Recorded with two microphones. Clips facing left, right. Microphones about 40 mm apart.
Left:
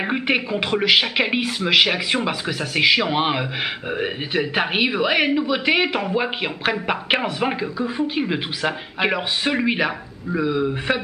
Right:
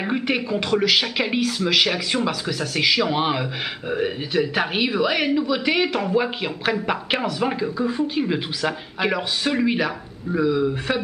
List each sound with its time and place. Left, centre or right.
0.0 s a woman's voice: left